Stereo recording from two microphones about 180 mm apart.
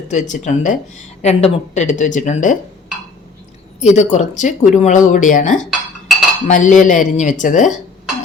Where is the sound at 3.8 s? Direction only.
40° left (ahead or behind).